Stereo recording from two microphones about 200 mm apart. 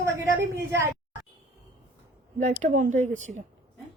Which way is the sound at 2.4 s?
35° right (ahead or behind).